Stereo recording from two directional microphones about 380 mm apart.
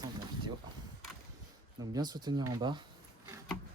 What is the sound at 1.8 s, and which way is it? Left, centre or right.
Speech, centre.